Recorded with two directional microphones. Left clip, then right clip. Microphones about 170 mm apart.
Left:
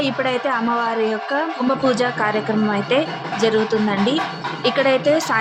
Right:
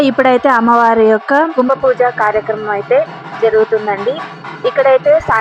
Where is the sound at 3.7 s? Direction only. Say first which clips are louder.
Right 5 dB; 50° right (ahead or behind).